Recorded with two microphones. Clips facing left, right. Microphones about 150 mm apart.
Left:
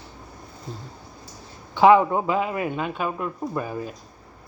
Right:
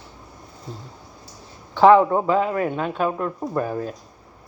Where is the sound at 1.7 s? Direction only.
10° left (ahead or behind).